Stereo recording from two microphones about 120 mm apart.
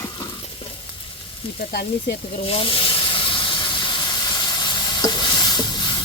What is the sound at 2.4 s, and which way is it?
Steam, 50° left (ahead or behind).